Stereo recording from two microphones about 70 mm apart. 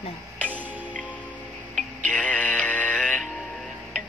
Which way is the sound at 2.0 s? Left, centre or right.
Left.